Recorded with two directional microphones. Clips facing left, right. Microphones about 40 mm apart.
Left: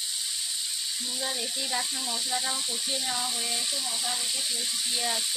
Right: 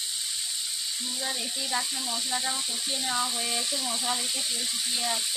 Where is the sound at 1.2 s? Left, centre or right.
Centre.